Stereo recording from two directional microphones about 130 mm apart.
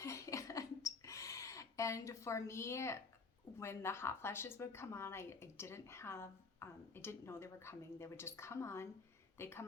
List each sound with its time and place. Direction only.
0.0 s rodents: 25° left (ahead or behind)
3.6 s a woman's voice: 20° left (ahead or behind)